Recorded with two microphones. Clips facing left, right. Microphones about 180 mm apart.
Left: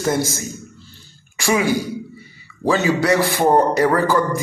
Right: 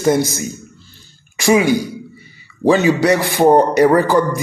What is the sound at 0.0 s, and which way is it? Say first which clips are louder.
A man's voice: right 5 dB; 20° right (ahead or behind).